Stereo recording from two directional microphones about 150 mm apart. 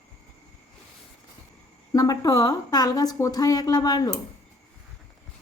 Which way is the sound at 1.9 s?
25° left (ahead or behind).